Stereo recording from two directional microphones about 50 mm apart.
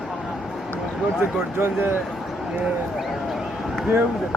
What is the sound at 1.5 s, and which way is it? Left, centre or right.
Speech, right.